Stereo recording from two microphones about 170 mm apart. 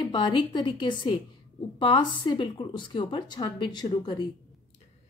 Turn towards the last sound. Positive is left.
turn(degrees=25)  # may be behind; listen again after turning